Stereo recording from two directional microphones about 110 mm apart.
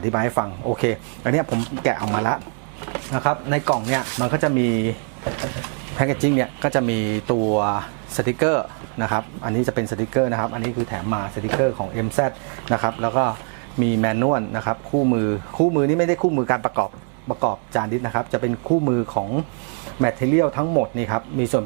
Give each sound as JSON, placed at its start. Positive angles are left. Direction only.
{"t": 0.1, "sound": "speech", "side_deg": -15}
{"t": 6.0, "sound": "speech", "side_deg": -15}